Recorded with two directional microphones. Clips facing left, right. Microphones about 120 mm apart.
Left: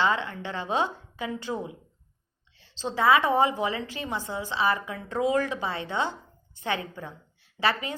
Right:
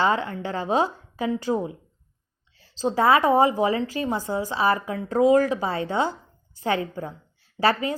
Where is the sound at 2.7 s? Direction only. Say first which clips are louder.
Right 3 dB; 40° right (ahead or behind).